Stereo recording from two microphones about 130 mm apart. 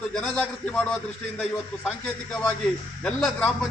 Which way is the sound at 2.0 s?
15° left (ahead or behind).